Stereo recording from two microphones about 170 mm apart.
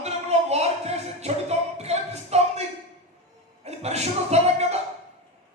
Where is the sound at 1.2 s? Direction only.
40° right (ahead or behind).